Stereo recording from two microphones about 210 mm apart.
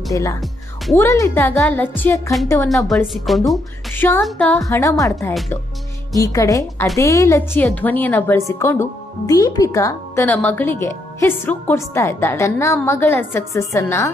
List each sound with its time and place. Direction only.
0.1 s speech: 15° left (ahead or behind)
0.4 s music: centre (ahead or behind)
1.0 s speech: 15° left (ahead or behind)
2.9 s speech: centre (ahead or behind)
6.1 s speech: 15° left (ahead or behind)